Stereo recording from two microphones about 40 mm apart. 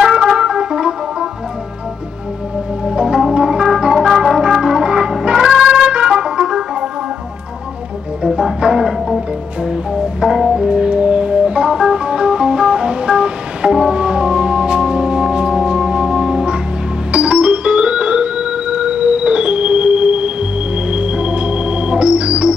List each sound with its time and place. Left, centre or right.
0.0 s organ: centre
2.9 s organ: centre
3.3 s music: centre
8.2 s music: centre
10.2 s organ: centre